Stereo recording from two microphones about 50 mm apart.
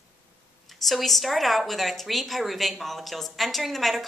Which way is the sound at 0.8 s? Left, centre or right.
Centre.